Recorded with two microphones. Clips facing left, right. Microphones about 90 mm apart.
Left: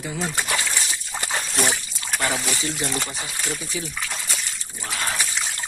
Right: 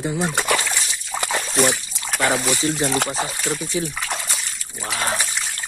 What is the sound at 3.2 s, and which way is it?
Speech, 40° right (ahead or behind).